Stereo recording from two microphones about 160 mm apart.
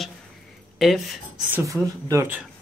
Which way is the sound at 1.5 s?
20° right (ahead or behind).